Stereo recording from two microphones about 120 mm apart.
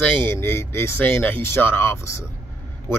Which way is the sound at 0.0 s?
20° left (ahead or behind).